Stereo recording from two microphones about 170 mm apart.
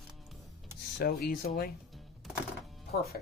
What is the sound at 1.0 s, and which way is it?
Speech, 65° left (ahead or behind).